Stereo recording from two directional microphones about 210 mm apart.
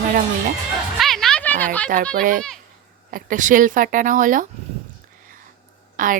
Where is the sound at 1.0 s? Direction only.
Centre (ahead or behind).